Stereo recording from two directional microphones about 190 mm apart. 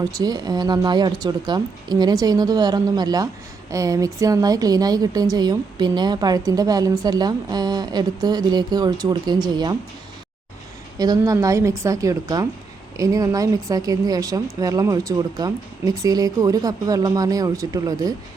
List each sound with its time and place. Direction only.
0.0 s a woman's voice: 20° right (ahead or behind)
10.9 s a woman's voice: 20° right (ahead or behind)